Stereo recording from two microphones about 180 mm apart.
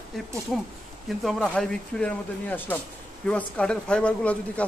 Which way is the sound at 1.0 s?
5° left (ahead or behind).